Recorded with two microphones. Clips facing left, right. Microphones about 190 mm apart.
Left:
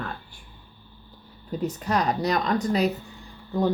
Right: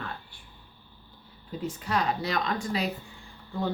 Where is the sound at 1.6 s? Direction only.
40° left (ahead or behind).